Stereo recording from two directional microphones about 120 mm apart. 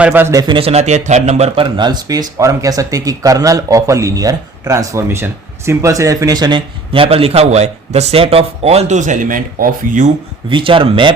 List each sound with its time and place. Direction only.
0.0 s speech: 15° right (ahead or behind)
0.3 s a man's voice: 45° right (ahead or behind); by 1.6 s 65° right (ahead or behind)
1.7 s speech: 35° right (ahead or behind)
6.9 s a man's voice: 50° right (ahead or behind); by 10.0 s 90° right
10.5 s speech: 45° right (ahead or behind)